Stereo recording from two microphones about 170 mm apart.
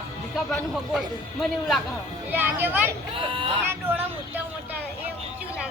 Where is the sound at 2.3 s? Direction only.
10° right (ahead or behind).